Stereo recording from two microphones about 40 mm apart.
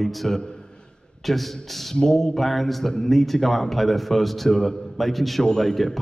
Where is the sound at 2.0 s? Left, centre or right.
Centre.